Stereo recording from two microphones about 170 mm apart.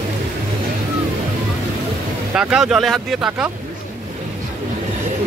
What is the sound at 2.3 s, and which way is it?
Speech, 5° right (ahead or behind).